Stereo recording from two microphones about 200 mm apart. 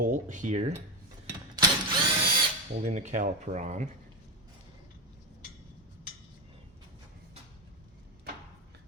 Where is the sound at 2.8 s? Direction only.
35° right (ahead or behind).